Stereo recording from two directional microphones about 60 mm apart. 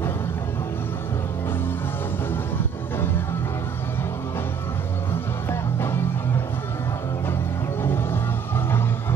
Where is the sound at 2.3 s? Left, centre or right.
Left.